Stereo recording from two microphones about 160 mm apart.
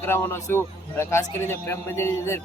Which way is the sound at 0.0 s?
15° left (ahead or behind).